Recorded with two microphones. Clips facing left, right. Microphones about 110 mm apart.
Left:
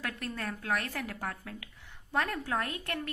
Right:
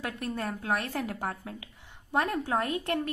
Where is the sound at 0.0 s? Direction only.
20° right (ahead or behind).